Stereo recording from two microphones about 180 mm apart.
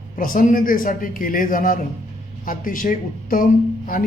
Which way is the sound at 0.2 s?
50° left (ahead or behind).